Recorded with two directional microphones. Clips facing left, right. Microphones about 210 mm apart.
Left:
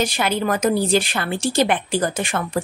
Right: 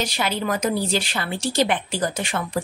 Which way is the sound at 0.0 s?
50° left (ahead or behind).